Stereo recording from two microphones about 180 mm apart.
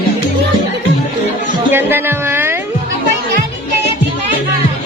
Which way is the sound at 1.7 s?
10° right (ahead or behind).